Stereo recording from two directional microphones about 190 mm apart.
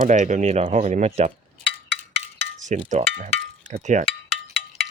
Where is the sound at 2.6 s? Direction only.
40° right (ahead or behind).